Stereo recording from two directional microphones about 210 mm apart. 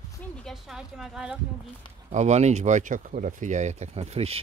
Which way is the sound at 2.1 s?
35° right (ahead or behind).